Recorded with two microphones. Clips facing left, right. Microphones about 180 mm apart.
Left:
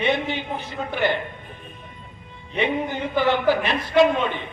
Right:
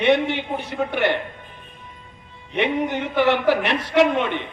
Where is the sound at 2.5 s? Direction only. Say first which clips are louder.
Right 2 dB; 75° right (ahead or behind).